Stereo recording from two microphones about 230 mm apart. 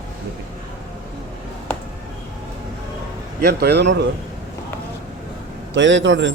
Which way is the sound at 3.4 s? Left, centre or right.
Right.